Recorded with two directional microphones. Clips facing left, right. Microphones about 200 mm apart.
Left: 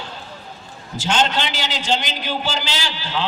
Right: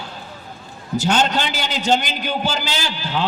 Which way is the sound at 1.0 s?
40° right (ahead or behind).